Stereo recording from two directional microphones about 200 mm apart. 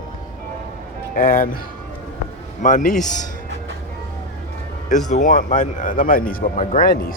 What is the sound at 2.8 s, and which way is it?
Speech, 5° left (ahead or behind).